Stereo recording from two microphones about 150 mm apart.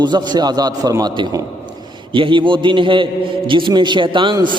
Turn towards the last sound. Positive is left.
turn(degrees=-30)  # may be behind; listen again after turning